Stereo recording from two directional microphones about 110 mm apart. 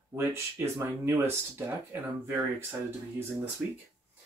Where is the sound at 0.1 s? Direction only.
25° right (ahead or behind).